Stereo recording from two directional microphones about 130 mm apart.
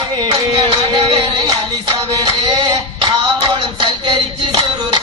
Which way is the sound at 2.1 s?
30° right (ahead or behind).